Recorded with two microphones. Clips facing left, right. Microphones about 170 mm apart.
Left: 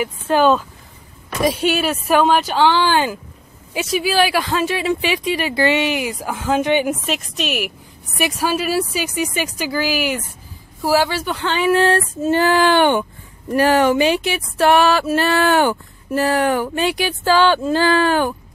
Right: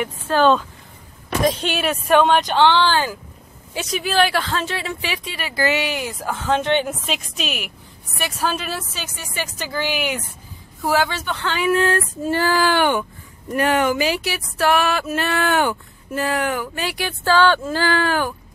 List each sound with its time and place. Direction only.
0.3 s speech: 10° left (ahead or behind)
3.7 s speech: 5° left (ahead or behind); by 5.9 s 25° left (ahead or behind)
5.9 s speech: 10° left (ahead or behind)
11.4 s speech: 25° left (ahead or behind)
16.7 s speech: 20° left (ahead or behind)